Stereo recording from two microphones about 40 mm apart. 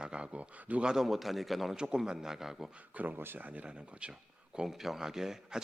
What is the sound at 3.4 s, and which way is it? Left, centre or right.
Speech, right.